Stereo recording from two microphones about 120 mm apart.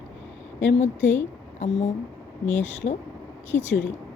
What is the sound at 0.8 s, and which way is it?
Speech, 75° left (ahead or behind).